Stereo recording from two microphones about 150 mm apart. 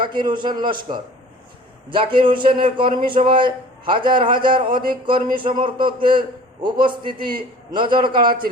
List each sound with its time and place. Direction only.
0.0 s a man's voice: 30° right (ahead or behind)
2.1 s a man's voice: 35° right (ahead or behind)